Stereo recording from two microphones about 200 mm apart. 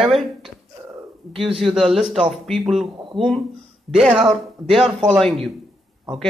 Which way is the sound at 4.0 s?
5° right (ahead or behind).